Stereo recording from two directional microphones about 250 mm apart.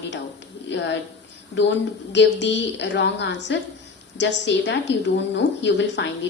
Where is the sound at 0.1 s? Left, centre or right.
Left.